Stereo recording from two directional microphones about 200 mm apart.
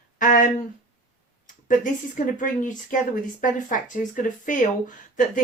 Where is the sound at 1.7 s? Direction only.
40° left (ahead or behind).